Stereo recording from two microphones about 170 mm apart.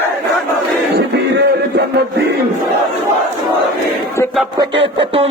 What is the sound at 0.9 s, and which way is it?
Music, 80° right.